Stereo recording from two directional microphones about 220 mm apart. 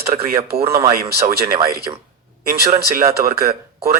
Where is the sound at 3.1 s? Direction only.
45° right (ahead or behind).